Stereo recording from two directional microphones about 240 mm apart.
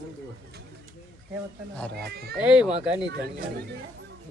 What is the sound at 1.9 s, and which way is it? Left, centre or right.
Speech, right.